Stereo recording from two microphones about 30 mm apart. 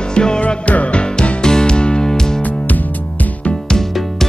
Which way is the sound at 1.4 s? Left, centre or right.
Left.